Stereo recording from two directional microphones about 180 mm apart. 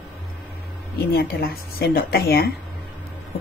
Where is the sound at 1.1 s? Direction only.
60° left (ahead or behind).